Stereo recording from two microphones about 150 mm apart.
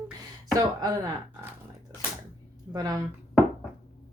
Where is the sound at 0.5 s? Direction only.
25° right (ahead or behind).